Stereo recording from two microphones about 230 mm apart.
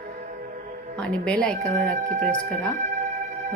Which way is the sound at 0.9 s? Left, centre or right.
Centre.